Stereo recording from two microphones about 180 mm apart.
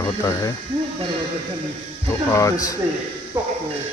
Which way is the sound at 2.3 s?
15° left (ahead or behind).